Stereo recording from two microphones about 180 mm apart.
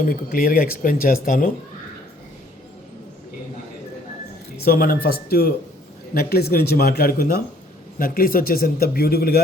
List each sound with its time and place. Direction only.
0.0 s speech: 50° left (ahead or behind)
4.6 s speech: 55° left (ahead or behind)